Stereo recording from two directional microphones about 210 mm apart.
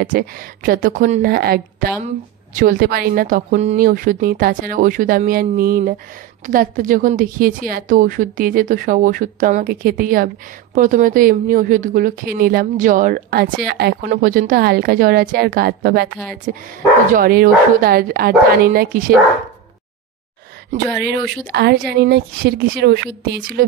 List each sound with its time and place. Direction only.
0.0 s a woman's voice: 40° right (ahead or behind)
21.0 s speech: 55° right (ahead or behind)